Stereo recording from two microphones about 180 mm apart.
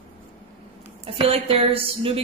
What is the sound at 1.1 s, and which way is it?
A woman's voice, 30° right (ahead or behind).